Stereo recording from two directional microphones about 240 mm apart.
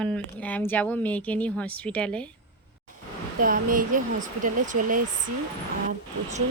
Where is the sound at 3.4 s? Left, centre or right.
Right.